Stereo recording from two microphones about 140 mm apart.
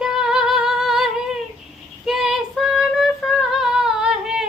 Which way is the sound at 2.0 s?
Centre (ahead or behind).